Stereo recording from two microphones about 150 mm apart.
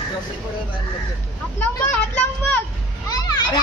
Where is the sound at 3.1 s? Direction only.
25° left (ahead or behind).